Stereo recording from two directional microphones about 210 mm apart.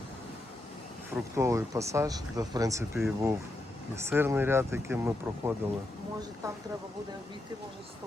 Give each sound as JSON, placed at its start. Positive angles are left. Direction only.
{"t": 1.1, "sound": "speech", "side_deg": -15}